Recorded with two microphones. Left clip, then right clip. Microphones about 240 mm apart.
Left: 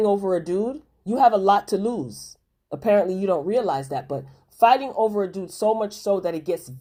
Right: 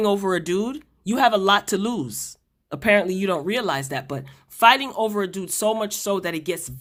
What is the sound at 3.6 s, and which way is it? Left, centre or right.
Speech, right.